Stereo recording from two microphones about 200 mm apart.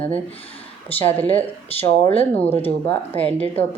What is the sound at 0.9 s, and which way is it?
Speech, 10° left (ahead or behind).